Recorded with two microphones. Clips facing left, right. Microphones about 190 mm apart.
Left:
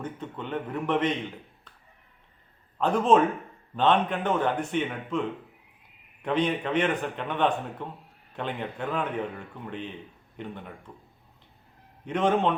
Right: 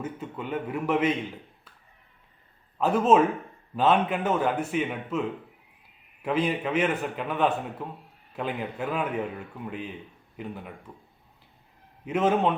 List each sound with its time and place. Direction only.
0.0 s a man's voice: 5° right (ahead or behind)
2.7 s a man's voice: 5° right (ahead or behind)
12.0 s a man's voice: 5° right (ahead or behind)